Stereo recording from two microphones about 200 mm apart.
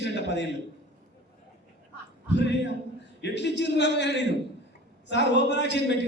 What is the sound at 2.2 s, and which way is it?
A man's voice, 60° left (ahead or behind).